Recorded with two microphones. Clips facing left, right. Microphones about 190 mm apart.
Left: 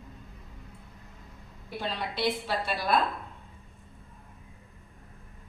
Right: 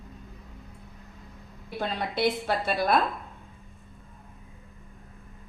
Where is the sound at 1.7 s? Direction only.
50° right (ahead or behind).